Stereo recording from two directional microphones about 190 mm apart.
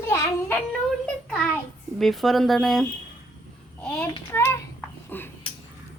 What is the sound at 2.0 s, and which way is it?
A child's voice, centre (ahead or behind).